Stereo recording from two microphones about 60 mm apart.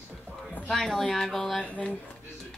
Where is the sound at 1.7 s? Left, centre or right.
Left.